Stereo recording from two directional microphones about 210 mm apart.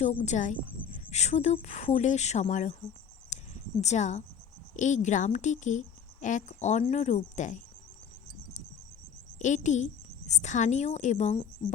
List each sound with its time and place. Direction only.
0.0 s speech: 35° left (ahead or behind)
3.2 s a sound: 35° left (ahead or behind)
4.8 s speech: 35° left (ahead or behind)
9.4 s a woman's voice: 35° left (ahead or behind)